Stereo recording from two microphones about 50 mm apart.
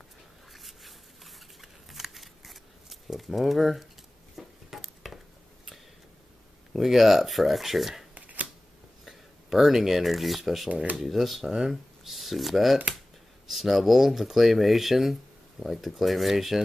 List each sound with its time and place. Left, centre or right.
0.5 s shuffling cards: centre
4.4 s a sound: centre
6.7 s speech: centre
8.1 s shuffling cards: right
9.0 s speech: centre